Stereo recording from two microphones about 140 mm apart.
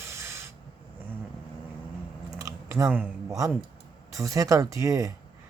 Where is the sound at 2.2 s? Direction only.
20° right (ahead or behind).